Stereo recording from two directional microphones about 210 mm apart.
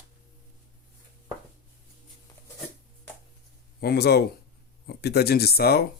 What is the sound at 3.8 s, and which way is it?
Speech, 50° left (ahead or behind).